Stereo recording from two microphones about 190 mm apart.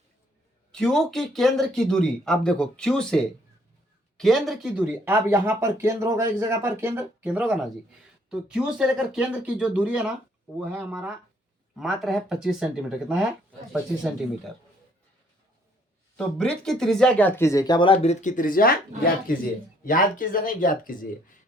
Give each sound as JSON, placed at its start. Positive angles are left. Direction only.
{"t": 0.7, "sound": "speech", "side_deg": 5}
{"t": 16.1, "sound": "speech", "side_deg": 5}